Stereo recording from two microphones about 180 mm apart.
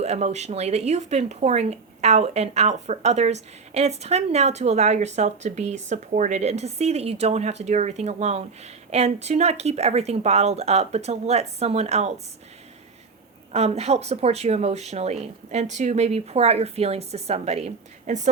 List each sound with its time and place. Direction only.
0.0 s speech: 35° right (ahead or behind)
13.5 s speech: 35° right (ahead or behind)